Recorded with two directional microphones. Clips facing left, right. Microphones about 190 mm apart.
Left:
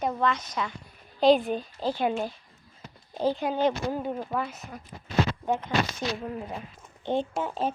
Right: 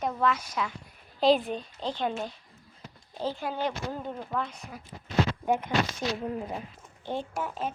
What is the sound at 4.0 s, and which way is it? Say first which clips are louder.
Speech: left 3 dB; 10° left (ahead or behind).